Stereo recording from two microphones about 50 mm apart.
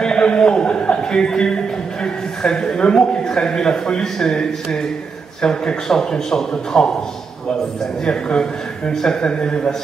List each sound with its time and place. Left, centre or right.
0.0 s a man's voice: centre
8.0 s a man's voice: centre